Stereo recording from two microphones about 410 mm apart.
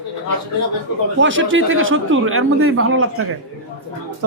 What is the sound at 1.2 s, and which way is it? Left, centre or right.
A man's voice, right.